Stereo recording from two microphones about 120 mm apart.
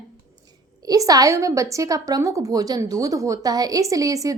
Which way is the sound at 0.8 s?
30° right (ahead or behind).